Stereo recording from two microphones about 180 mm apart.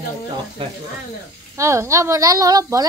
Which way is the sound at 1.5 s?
15° right (ahead or behind).